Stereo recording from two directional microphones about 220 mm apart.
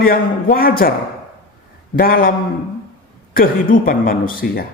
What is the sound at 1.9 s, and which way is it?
Speech, 40° left (ahead or behind).